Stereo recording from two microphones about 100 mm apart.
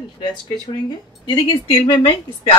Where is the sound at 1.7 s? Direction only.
70° left (ahead or behind).